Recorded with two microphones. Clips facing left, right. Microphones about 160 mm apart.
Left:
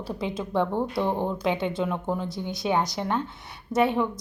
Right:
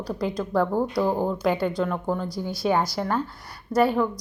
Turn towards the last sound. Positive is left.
turn(degrees=0)  # may be behind; listen again after turning